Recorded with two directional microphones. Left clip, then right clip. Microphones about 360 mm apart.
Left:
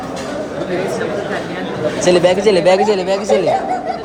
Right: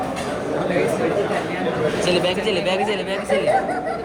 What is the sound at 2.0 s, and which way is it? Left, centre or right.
Speech, centre.